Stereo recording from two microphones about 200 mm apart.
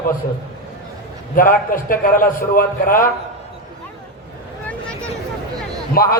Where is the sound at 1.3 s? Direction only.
45° left (ahead or behind).